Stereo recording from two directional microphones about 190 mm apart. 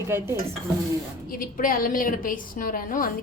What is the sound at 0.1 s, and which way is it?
Speech, 10° right (ahead or behind).